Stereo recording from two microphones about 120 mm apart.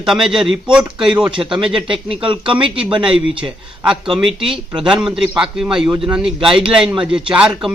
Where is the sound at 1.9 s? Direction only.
45° right (ahead or behind).